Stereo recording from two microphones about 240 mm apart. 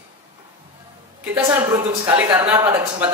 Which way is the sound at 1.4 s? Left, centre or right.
Centre.